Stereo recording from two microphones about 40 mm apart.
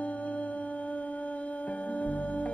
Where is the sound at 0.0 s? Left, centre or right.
Left.